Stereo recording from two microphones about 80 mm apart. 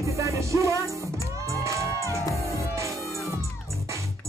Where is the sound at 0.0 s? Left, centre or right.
Right.